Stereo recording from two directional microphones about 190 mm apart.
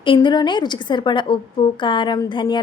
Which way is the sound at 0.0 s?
25° left (ahead or behind).